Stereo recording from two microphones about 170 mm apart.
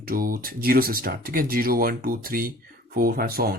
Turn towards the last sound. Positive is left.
turn(degrees=-65)  # may be behind; listen again after turning